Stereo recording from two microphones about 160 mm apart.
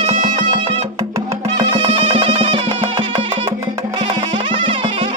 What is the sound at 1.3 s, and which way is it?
Music, 35° right (ahead or behind).